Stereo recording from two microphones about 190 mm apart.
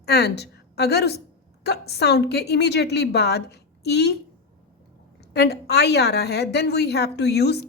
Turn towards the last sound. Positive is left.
turn(degrees=60)  # may be behind; listen again after turning